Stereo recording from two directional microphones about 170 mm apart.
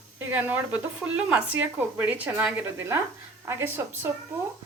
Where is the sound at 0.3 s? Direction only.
10° right (ahead or behind).